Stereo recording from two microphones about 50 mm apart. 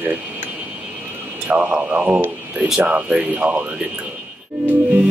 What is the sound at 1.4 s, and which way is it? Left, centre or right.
Speech, right.